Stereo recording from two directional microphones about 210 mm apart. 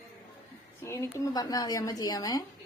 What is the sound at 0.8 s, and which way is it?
Speech, 15° left (ahead or behind).